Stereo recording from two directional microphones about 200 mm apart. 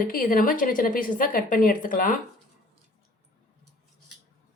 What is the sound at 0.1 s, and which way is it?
A woman's voice, 45° left (ahead or behind).